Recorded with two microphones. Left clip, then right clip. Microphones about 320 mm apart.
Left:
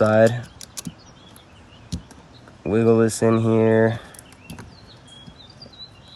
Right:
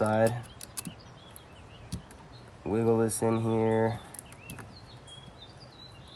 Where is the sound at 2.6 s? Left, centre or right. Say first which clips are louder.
Left 9 dB; left.